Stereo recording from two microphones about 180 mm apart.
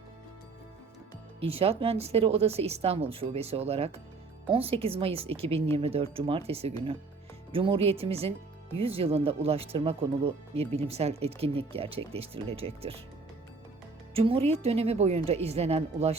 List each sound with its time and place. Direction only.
1.4 s speech: 30° right (ahead or behind)
14.1 s speech: 30° right (ahead or behind)